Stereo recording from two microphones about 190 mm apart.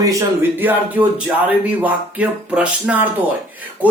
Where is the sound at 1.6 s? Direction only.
5° right (ahead or behind).